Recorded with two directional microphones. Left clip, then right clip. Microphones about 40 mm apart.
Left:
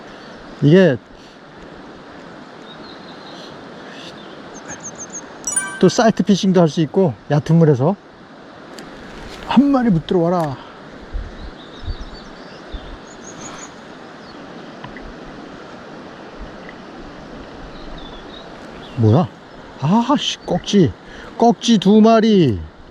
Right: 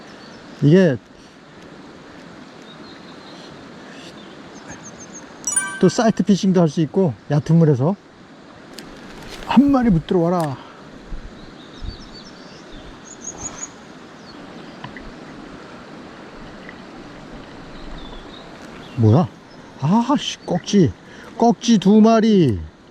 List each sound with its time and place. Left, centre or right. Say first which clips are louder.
0.6 s speech: left 3 dB; centre
4.7 s vehicle: left 8 dB; right
5.5 s speech: left 2 dB; centre
9.3 s a sound: left 1 dB; centre
10.2 s speech: left 2 dB; centre
13.2 s a sound: right 2 dB; right
18.9 s speech: left 1 dB; centre